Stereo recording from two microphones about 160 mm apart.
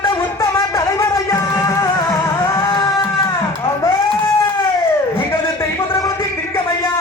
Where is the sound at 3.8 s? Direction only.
15° left (ahead or behind).